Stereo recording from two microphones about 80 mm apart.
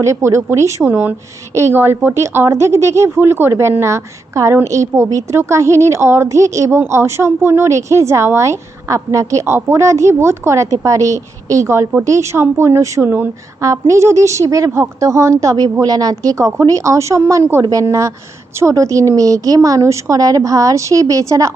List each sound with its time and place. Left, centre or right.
0.0 s a woman's voice: right
0.9 s a woman's voice: right
1.5 s a woman's voice: right
13.6 s a woman's voice: right